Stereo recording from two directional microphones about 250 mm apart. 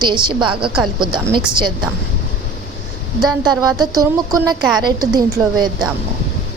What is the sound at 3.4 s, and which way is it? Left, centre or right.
A woman's voice, centre.